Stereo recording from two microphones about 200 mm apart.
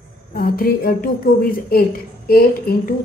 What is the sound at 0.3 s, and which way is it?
A woman's voice, 50° left (ahead or behind).